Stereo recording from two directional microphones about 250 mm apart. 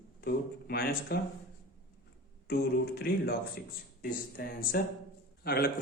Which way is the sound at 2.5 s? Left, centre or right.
Left.